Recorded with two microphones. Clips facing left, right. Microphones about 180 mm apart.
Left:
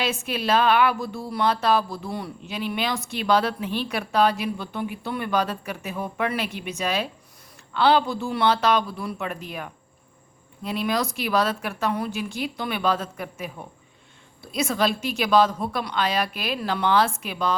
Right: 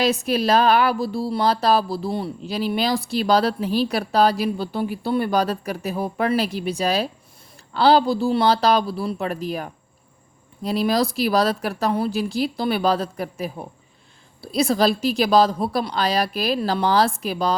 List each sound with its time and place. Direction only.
0.0 s speech: 40° right (ahead or behind)